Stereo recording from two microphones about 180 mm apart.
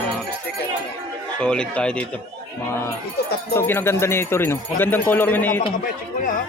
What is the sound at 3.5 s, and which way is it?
Speech, 10° left (ahead or behind).